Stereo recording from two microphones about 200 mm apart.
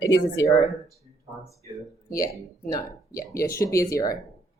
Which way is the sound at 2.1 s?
15° left (ahead or behind).